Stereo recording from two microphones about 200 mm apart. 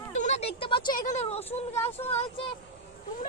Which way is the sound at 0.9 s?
40° left (ahead or behind).